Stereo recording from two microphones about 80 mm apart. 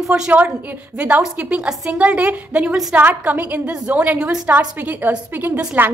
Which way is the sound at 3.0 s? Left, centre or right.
Right.